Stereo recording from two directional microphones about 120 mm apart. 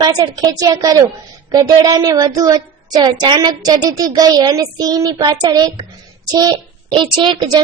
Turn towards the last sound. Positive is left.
turn(degrees=-40)  # may be behind; listen again after turning